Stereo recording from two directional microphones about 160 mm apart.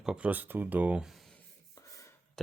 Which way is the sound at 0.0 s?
5° right (ahead or behind).